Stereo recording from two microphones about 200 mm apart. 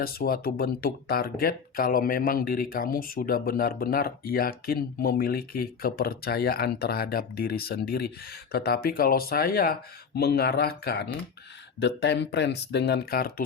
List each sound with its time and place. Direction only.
0.0 s speech: 50° left (ahead or behind)